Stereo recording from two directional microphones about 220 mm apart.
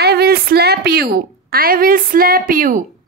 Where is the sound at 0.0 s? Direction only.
45° right (ahead or behind).